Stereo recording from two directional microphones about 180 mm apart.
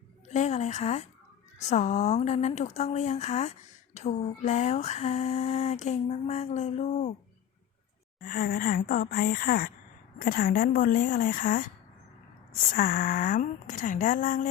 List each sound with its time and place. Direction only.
0.3 s a woman's voice: 40° left (ahead or behind)
1.7 s a sound: 40° left (ahead or behind)
8.2 s speech: 50° left (ahead or behind)
12.7 s speech: 50° left (ahead or behind)